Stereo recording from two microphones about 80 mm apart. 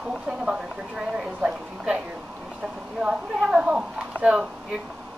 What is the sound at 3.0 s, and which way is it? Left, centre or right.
Speech, centre.